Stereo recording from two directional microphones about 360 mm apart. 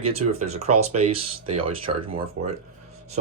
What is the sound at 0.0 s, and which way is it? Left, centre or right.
Speech, centre.